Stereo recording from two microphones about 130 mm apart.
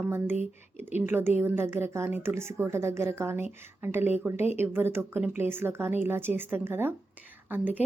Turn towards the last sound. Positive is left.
turn(degrees=-15)  # may be behind; listen again after turning